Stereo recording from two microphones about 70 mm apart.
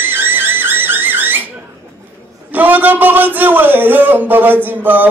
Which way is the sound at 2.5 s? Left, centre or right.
Right.